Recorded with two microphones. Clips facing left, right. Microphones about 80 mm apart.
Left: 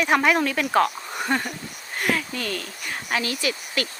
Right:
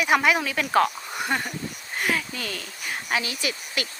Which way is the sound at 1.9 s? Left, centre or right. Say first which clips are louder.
Left 2 dB; centre.